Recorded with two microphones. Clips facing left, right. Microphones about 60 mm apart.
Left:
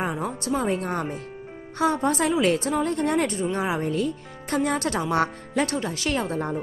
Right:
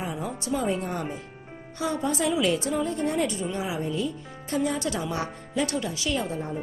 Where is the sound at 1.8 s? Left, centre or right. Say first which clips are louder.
Left 5 dB; left.